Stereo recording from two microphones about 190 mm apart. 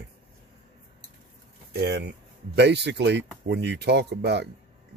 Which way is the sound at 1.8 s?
65° right (ahead or behind).